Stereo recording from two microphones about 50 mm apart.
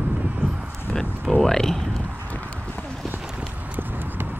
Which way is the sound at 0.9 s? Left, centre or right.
Centre.